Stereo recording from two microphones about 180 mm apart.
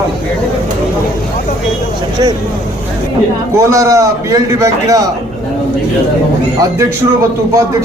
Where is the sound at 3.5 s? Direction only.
15° right (ahead or behind).